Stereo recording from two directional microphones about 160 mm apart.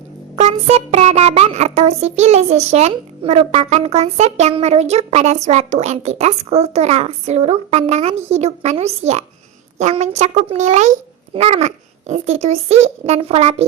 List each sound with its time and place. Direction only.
0.3 s a child's voice: 40° right (ahead or behind)